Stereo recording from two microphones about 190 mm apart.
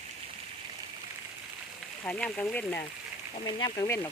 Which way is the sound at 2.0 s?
5° left (ahead or behind).